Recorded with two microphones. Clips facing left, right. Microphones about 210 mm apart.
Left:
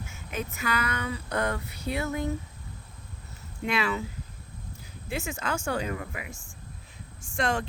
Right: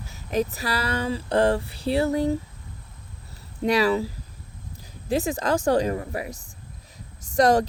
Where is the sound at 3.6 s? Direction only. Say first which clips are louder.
Right 8 dB; 35° right (ahead or behind).